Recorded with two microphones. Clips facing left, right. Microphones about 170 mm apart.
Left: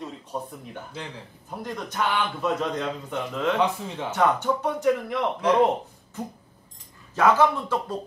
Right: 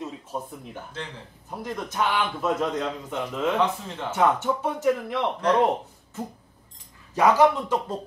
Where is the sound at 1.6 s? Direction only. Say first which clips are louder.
Right 1 dB; 5° right (ahead or behind).